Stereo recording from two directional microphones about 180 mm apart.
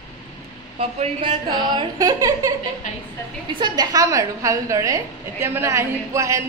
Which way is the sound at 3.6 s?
20° right (ahead or behind).